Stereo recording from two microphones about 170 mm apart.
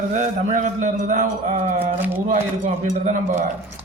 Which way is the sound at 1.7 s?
10° right (ahead or behind).